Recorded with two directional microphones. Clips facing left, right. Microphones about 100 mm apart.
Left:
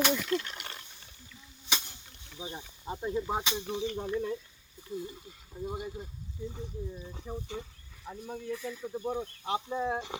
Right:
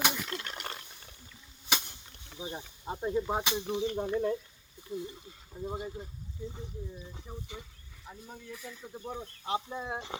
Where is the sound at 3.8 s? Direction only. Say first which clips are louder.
Right 2 dB; 20° right (ahead or behind).